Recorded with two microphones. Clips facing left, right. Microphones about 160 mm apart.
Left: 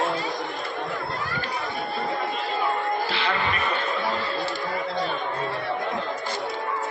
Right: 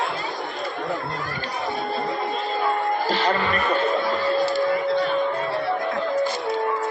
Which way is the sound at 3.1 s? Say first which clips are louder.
Right 5 dB; 45° right (ahead or behind).